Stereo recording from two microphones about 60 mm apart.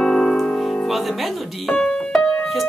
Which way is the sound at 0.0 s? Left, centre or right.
Centre.